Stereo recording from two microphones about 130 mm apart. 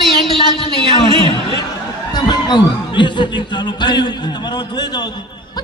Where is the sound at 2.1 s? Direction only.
35° left (ahead or behind).